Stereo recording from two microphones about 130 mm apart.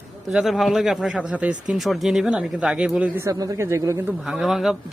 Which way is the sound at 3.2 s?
25° right (ahead or behind).